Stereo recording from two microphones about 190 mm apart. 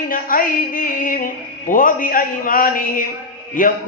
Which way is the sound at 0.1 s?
45° left (ahead or behind).